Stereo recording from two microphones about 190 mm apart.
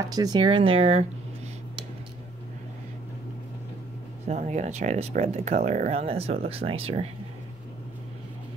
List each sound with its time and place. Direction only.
0.1 s speech: 20° right (ahead or behind)
4.3 s speech: 40° right (ahead or behind)